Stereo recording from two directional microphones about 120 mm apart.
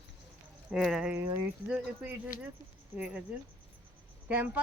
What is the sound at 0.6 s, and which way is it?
Speech, centre (ahead or behind).